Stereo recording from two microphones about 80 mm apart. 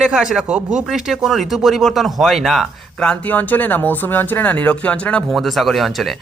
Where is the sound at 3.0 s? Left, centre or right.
Centre.